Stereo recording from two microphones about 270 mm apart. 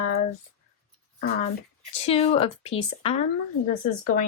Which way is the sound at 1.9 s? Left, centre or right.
Left.